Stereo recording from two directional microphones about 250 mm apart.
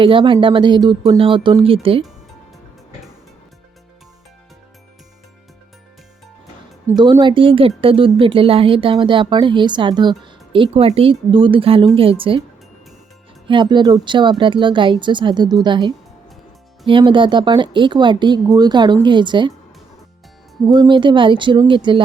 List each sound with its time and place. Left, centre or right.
0.0 s speech: centre
6.8 s speech: centre
13.5 s speech: centre
20.7 s speech: centre